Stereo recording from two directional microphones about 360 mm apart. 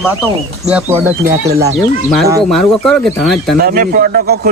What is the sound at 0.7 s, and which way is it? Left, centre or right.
Speech, centre.